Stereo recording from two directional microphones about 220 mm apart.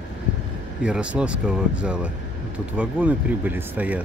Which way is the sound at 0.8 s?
5° right (ahead or behind).